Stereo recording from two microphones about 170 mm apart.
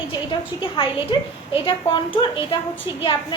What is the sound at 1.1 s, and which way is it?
A woman's voice, 30° left (ahead or behind).